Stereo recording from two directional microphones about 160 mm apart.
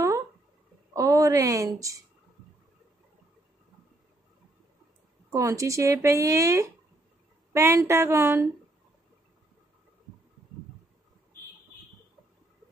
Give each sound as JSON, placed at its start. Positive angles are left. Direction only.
{"t": 0.9, "sound": "a woman's voice", "side_deg": -20}
{"t": 5.3, "sound": "speech", "side_deg": -20}
{"t": 7.5, "sound": "a sound", "side_deg": -15}